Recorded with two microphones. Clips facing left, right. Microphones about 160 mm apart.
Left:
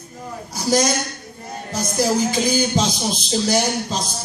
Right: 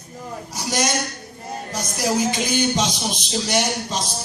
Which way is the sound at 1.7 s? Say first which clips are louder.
Left 3 dB; 30° left (ahead or behind).